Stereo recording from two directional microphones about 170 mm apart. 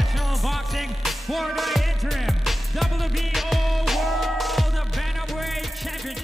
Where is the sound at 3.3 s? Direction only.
Centre (ahead or behind).